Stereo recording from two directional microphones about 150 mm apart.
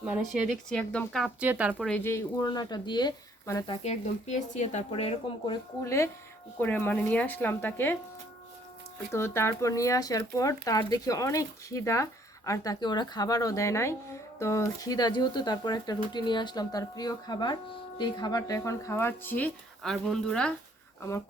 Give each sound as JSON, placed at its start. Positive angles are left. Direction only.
{"t": 0.2, "sound": "speech", "side_deg": 0}
{"t": 1.8, "sound": "speech", "side_deg": 10}
{"t": 3.7, "sound": "speech", "side_deg": 50}
{"t": 5.8, "sound": "speech", "side_deg": 20}
{"t": 9.1, "sound": "speech", "side_deg": 15}